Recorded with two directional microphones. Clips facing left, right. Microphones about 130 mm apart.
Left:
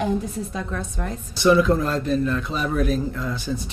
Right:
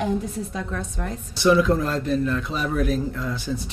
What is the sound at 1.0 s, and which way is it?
A man's voice, 20° left (ahead or behind).